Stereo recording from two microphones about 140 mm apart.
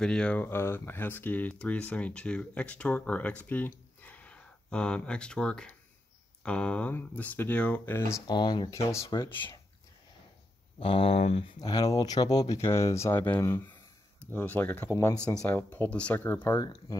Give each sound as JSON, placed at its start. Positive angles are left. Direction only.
{"t": 0.0, "sound": "speech", "side_deg": 5}
{"t": 8.3, "sound": "speech", "side_deg": 30}
{"t": 9.0, "sound": "speech", "side_deg": 35}
{"t": 10.8, "sound": "speech", "side_deg": 40}
{"t": 11.9, "sound": "speech", "side_deg": 30}